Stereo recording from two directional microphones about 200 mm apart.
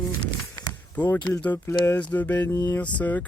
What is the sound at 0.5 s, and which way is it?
Basketball bounce, 10° left (ahead or behind).